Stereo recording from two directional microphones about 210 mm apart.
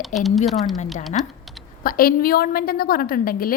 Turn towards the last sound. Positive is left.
turn(degrees=45)  # may be behind; listen again after turning